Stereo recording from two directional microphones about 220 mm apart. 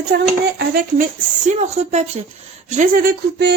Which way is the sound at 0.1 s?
45° right (ahead or behind).